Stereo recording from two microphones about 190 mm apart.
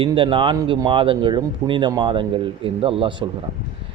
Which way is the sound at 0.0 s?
25° right (ahead or behind).